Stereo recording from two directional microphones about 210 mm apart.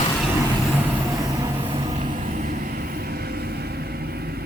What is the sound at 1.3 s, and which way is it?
Vehicle, 20° right (ahead or behind).